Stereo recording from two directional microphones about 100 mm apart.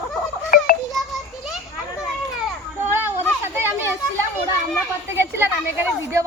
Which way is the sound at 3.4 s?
25° right (ahead or behind).